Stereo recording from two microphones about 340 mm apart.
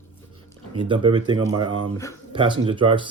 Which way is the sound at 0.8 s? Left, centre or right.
Centre.